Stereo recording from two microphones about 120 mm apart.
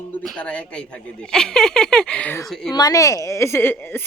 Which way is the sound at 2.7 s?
30° left (ahead or behind).